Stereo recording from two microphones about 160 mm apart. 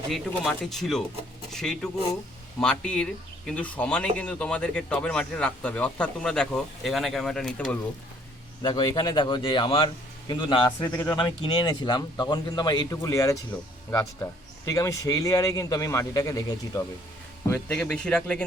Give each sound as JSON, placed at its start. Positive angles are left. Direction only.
{"t": 0.1, "sound": "speech", "side_deg": 0}
{"t": 8.6, "sound": "speech", "side_deg": 25}
{"t": 10.8, "sound": "speech", "side_deg": 15}
{"t": 11.2, "sound": "speech", "side_deg": 30}
{"t": 17.5, "sound": "speech", "side_deg": 10}